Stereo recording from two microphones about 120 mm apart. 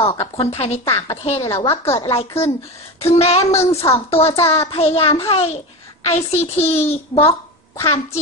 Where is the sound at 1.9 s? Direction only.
50° left (ahead or behind).